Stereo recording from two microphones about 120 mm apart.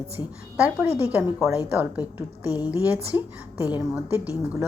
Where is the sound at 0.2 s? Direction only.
15° right (ahead or behind).